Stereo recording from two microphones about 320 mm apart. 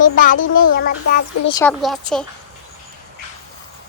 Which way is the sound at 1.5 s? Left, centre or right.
Centre.